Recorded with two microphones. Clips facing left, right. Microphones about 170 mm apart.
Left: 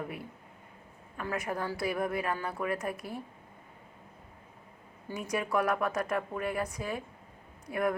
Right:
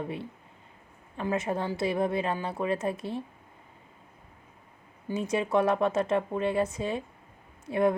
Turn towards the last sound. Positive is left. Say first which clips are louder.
# right 6 dB
turn(degrees=-25)  # may be behind; listen again after turning